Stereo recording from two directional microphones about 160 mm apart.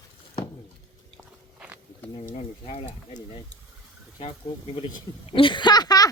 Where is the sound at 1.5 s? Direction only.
10° right (ahead or behind).